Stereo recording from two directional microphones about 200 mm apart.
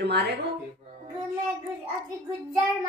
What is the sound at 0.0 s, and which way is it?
Speech, 55° right (ahead or behind).